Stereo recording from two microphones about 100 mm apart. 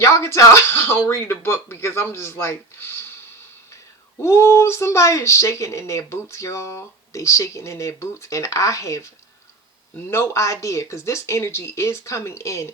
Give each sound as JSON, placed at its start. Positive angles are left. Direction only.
{"t": 0.0, "sound": "speech", "side_deg": 30}
{"t": 4.2, "sound": "speech", "side_deg": 25}
{"t": 10.1, "sound": "speech", "side_deg": 30}